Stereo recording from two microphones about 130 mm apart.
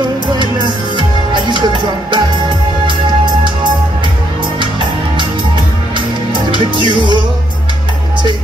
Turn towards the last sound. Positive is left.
turn(degrees=-35)  # may be behind; listen again after turning